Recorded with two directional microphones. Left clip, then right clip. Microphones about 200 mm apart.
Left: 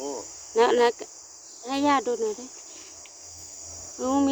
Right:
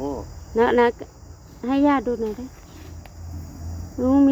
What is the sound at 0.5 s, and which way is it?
Speech, 20° left (ahead or behind).